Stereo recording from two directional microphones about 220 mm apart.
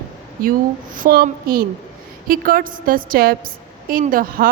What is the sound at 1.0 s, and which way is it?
A woman's voice, 40° right (ahead or behind).